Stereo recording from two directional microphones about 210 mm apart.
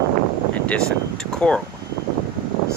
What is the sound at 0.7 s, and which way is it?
Speech, 5° left (ahead or behind).